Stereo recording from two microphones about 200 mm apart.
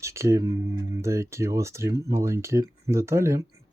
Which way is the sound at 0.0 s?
15° right (ahead or behind).